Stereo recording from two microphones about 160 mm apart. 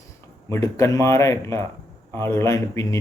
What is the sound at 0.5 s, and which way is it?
Speech, 20° left (ahead or behind).